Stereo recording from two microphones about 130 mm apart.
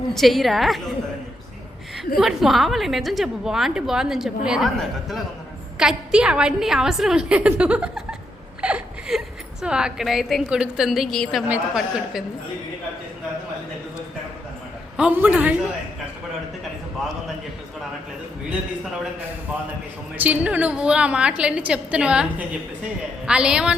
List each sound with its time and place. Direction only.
0.1 s a woman's voice: centre (ahead or behind)
2.1 s a woman's voice: centre (ahead or behind)
11.4 s a woman's voice: 10° right (ahead or behind)
14.9 s a woman's voice: 10° right (ahead or behind)
20.1 s a woman's voice: 10° right (ahead or behind)